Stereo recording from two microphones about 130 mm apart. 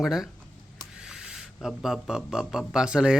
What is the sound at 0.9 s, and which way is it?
Owl, 5° right (ahead or behind).